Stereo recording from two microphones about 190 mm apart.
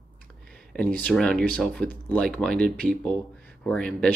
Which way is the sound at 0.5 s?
5° left (ahead or behind).